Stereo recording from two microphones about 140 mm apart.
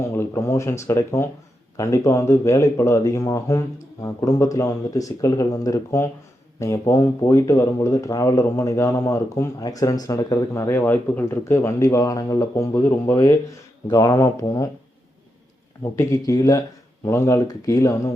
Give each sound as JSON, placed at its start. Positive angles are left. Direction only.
{"t": 0.1, "sound": "speech", "side_deg": 20}
{"t": 15.8, "sound": "speech", "side_deg": 20}